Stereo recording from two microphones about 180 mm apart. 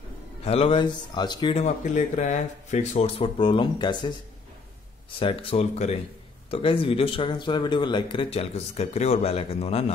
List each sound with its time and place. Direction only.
0.5 s speech: 30° left (ahead or behind)
1.6 s speech: 40° left (ahead or behind); by 4.1 s 25° left (ahead or behind)
5.2 s speech: 30° left (ahead or behind)